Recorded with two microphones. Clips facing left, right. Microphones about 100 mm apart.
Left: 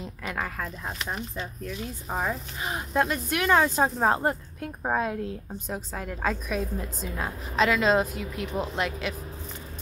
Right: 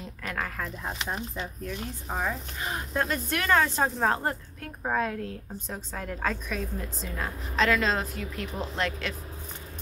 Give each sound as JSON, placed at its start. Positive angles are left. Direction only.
{"t": 0.2, "sound": "speech", "side_deg": 10}